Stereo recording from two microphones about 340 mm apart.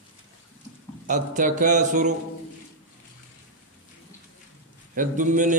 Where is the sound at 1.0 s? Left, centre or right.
Right.